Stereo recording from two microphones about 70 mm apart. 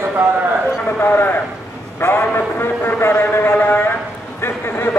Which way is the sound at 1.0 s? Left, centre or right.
Left.